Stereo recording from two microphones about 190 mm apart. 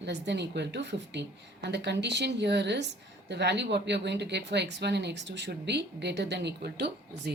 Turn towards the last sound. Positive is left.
turn(degrees=-60)  # may be behind; listen again after turning